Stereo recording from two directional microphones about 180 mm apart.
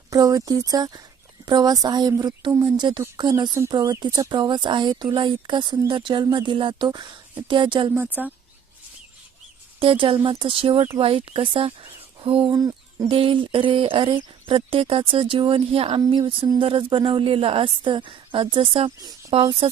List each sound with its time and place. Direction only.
0.1 s speech: 20° right (ahead or behind)
7.9 s speech: 10° right (ahead or behind)
9.8 s speech: 30° right (ahead or behind)